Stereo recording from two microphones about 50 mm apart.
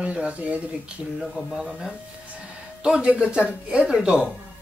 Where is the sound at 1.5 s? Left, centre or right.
Centre.